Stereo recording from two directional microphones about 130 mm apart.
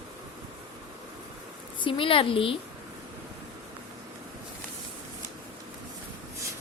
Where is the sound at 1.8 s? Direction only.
40° left (ahead or behind).